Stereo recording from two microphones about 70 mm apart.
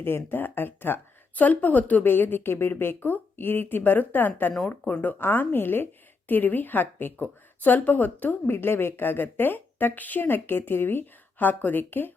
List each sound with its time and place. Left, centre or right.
0.3 s a woman's voice: left